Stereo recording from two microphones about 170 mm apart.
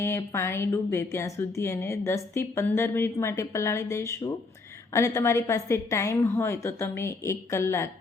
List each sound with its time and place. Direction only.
0.0 s speech: 15° left (ahead or behind)